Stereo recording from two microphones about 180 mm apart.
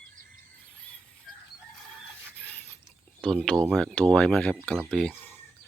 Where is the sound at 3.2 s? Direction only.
5° left (ahead or behind).